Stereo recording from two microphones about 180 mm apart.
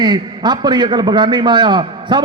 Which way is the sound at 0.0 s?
25° right (ahead or behind).